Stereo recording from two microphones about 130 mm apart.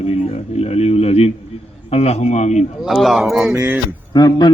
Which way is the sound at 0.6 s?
50° left (ahead or behind).